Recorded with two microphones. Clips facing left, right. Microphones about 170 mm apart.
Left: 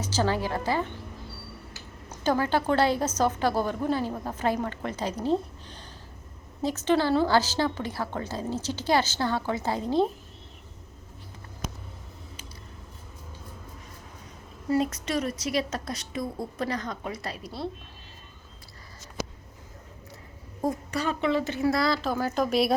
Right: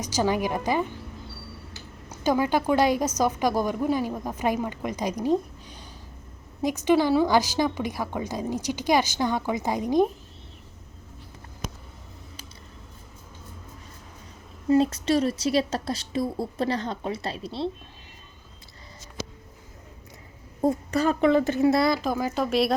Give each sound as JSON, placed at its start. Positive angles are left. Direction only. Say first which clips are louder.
{"t": 0.0, "sound": "a woman's voice", "louder": "right 2 dB", "side_deg": -15}
{"t": 2.2, "sound": "a woman's voice", "louder": "right 2 dB", "side_deg": -10}
{"t": 14.7, "sound": "a woman's voice", "louder": "right 5 dB", "side_deg": -30}
{"t": 20.9, "sound": "a woman's voice", "louder": "right 6 dB", "side_deg": -45}
{"t": 21.6, "sound": "a woman's voice", "louder": "right 4 dB", "side_deg": -25}
{"t": 22.4, "sound": "speech", "louder": "right 2 dB", "side_deg": 0}